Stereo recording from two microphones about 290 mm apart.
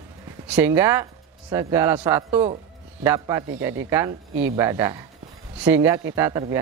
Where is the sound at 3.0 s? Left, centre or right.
Centre.